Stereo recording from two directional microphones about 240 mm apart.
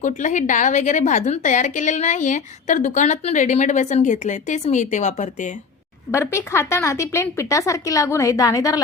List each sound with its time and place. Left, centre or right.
0.0 s a woman's voice: left
6.1 s speech: centre